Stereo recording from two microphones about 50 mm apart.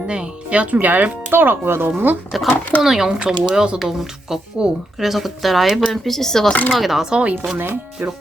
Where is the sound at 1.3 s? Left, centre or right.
Right.